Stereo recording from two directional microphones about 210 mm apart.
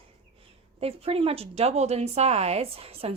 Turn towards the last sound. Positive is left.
turn(degrees=-30)  # may be behind; listen again after turning